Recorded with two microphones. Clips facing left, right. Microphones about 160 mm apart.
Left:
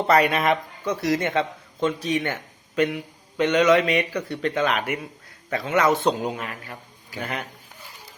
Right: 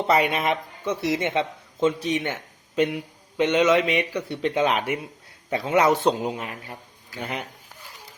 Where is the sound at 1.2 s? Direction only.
20° right (ahead or behind).